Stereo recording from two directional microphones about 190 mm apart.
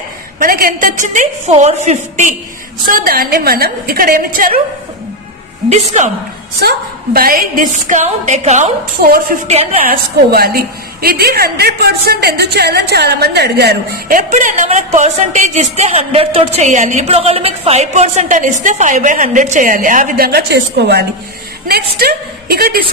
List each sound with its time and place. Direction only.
0.4 s a woman's voice: 50° right (ahead or behind)
2.9 s a woman's voice: 50° right (ahead or behind)
5.7 s a woman's voice: 40° right (ahead or behind)
7.2 s a woman's voice: 50° right (ahead or behind)
9.0 s a woman's voice: 50° right (ahead or behind)
22.0 s a woman's voice: 55° right (ahead or behind)